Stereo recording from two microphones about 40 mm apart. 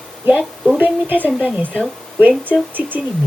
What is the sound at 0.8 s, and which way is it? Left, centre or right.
Speech, right.